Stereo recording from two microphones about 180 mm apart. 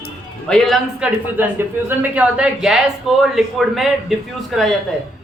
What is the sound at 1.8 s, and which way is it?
A man's voice, 10° right (ahead or behind).